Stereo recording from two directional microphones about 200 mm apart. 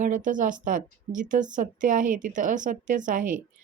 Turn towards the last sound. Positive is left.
turn(degrees=-40)  # may be behind; listen again after turning